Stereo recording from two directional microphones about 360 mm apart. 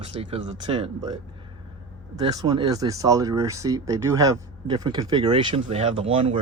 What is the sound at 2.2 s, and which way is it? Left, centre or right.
Speech, centre.